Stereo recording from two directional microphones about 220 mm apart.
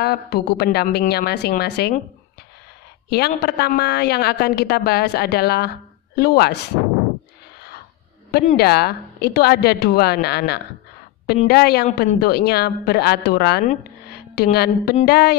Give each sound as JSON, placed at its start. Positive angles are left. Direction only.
{"t": 0.0, "sound": "a woman's voice", "side_deg": 45}
{"t": 3.1, "sound": "a woman's voice", "side_deg": 45}
{"t": 8.3, "sound": "a woman's voice", "side_deg": 45}